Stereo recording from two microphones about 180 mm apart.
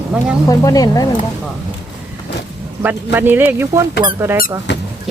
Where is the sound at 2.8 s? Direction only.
10° right (ahead or behind).